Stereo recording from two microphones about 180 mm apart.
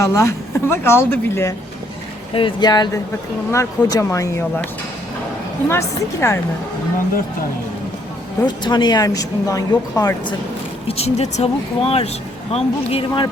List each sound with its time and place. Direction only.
0.0 s speech: 15° left (ahead or behind)
2.3 s speech: 25° left (ahead or behind)
5.6 s speech: 15° left (ahead or behind)
8.4 s speech: 25° left (ahead or behind)
10.8 s speech: 35° left (ahead or behind)